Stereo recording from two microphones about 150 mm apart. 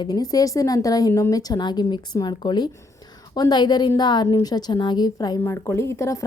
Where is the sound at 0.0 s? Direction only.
25° left (ahead or behind).